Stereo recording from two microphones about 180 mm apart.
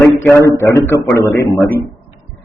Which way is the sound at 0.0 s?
15° left (ahead or behind).